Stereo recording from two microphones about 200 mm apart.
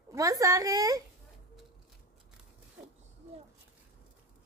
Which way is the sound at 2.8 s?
5° right (ahead or behind).